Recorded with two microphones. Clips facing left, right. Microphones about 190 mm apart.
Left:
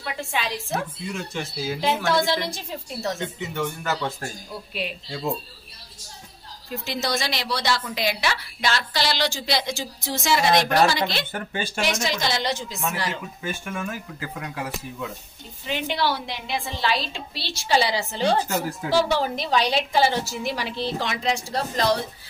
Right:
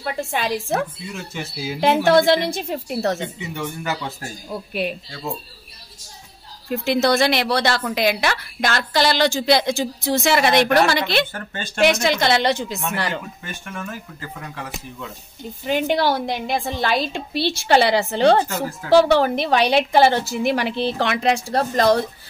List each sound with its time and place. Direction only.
0.0 s a woman's voice: 50° right (ahead or behind)
1.0 s speech: 5° right (ahead or behind)
2.0 s a woman's voice: 60° right (ahead or behind)
3.3 s speech: 10° right (ahead or behind)
4.5 s a woman's voice: 50° right (ahead or behind)
6.7 s a woman's voice: 60° right (ahead or behind)
11.3 s speech: 10° left (ahead or behind)
11.8 s a woman's voice: 60° right (ahead or behind)
13.4 s speech: 10° left (ahead or behind)
15.6 s a woman's voice: 45° right (ahead or behind)